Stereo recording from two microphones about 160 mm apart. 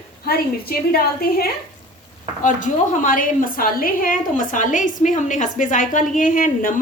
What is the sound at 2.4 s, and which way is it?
A woman's voice, 50° left (ahead or behind).